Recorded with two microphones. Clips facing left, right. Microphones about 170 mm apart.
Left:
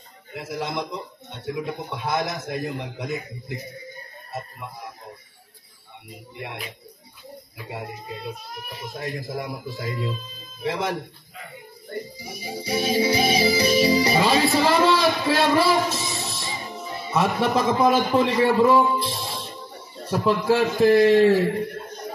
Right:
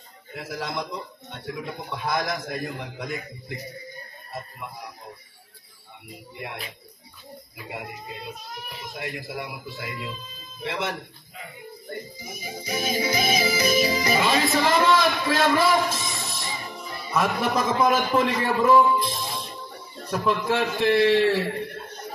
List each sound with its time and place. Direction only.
0.4 s a man's voice: 20° left (ahead or behind)
9.0 s a man's voice: 40° left (ahead or behind)
12.2 s music: 30° left (ahead or behind)
20.1 s a man's voice: 35° left (ahead or behind)